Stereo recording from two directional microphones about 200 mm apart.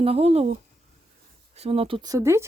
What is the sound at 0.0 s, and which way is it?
Speech, 30° right (ahead or behind).